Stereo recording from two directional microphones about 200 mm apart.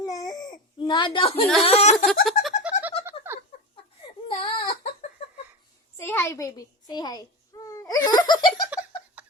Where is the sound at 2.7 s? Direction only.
5° right (ahead or behind).